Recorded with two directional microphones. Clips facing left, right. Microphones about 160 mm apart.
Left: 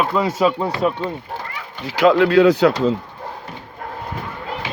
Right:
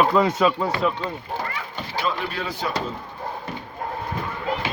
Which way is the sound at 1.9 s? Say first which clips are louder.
Left 14 dB; 90° left.